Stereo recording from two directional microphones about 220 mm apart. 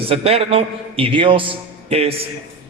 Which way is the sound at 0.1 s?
25° right (ahead or behind).